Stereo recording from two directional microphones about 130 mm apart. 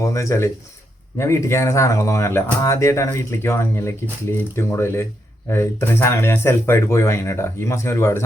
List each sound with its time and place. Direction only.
0.0 s speech: 25° left (ahead or behind)